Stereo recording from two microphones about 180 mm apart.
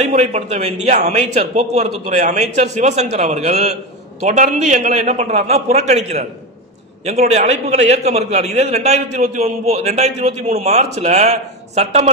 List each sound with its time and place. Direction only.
0.0 s a man's voice: 40° right (ahead or behind)